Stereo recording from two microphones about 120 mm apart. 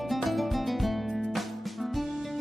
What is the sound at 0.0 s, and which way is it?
Music, centre (ahead or behind).